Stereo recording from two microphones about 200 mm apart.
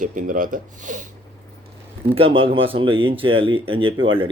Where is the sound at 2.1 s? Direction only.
25° right (ahead or behind).